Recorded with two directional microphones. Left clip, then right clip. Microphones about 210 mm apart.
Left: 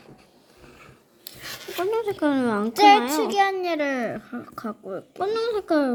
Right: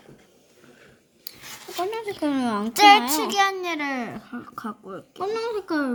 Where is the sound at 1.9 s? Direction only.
Centre (ahead or behind).